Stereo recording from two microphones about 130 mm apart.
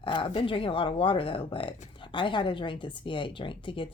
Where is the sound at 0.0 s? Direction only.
40° left (ahead or behind).